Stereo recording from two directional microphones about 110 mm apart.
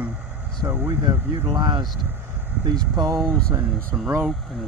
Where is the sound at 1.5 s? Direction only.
40° right (ahead or behind).